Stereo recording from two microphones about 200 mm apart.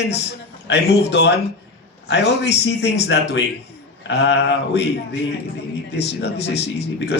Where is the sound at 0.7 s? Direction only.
60° left (ahead or behind).